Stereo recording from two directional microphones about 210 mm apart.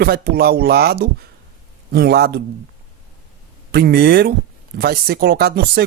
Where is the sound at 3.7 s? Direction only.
50° right (ahead or behind).